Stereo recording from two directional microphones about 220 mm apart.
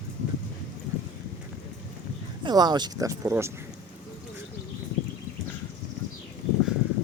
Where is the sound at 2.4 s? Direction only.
20° right (ahead or behind).